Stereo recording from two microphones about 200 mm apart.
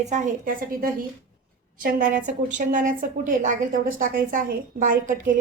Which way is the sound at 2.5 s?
40° right (ahead or behind).